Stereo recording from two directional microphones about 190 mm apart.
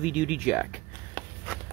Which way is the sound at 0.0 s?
5° right (ahead or behind).